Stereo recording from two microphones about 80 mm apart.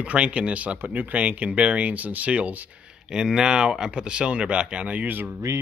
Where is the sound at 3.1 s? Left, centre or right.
Centre; by 5.4 s right.